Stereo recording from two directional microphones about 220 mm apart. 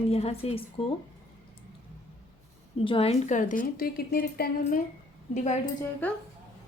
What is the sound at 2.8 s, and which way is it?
A woman's voice, 25° left (ahead or behind).